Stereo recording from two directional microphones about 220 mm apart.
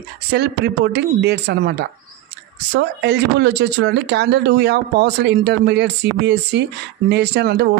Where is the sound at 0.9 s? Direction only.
50° right (ahead or behind).